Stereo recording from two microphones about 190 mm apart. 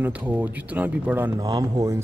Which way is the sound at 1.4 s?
20° right (ahead or behind).